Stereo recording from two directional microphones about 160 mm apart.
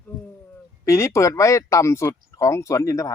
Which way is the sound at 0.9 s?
20° left (ahead or behind).